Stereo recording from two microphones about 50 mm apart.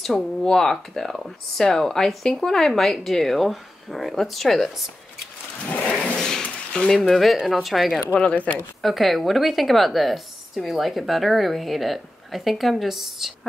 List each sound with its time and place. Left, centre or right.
0.0 s speech: centre
5.7 s a sound: left
6.1 s a sound: centre
6.8 s speech: centre
7.4 s speech: centre
8.1 s speech: left
8.8 s speech: centre